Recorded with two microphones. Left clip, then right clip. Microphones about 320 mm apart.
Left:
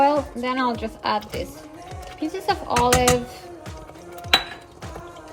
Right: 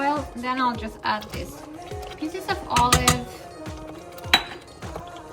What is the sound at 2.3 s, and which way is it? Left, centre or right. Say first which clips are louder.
Speech: left 3 dB; centre.